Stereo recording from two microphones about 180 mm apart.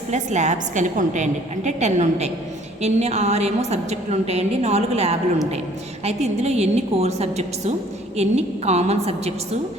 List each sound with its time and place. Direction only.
0.1 s a woman's voice: 40° right (ahead or behind)